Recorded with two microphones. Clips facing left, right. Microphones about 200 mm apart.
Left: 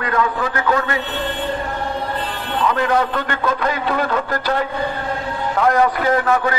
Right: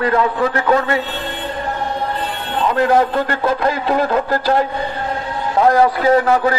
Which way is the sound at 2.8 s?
40° right (ahead or behind).